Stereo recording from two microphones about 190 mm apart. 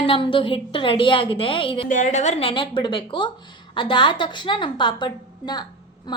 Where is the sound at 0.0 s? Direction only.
25° left (ahead or behind).